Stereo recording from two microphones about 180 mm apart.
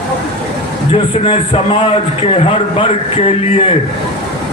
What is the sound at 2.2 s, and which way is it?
Speech, 35° left (ahead or behind).